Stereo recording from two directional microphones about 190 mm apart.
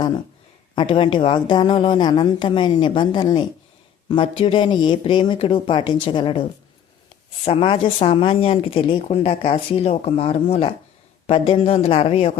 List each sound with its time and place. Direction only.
0.8 s speech: 25° left (ahead or behind)
7.4 s speech: 30° left (ahead or behind)